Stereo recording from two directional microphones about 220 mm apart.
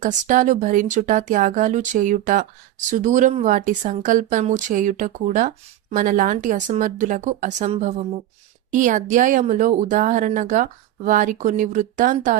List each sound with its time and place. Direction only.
0.0 s speech: 35° right (ahead or behind)